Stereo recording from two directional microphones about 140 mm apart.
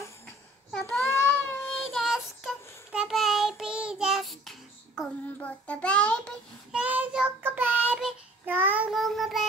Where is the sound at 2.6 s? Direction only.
20° left (ahead or behind).